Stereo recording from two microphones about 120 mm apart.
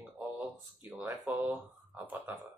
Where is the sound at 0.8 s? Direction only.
15° right (ahead or behind).